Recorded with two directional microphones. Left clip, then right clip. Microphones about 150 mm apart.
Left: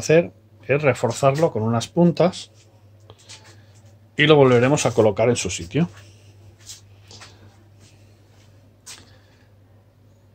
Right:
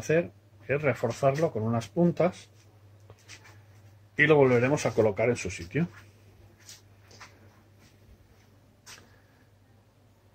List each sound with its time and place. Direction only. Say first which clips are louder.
0.1 s speech: left 10 dB; 25° left (ahead or behind)
4.2 s speech: left 7 dB; 15° left (ahead or behind)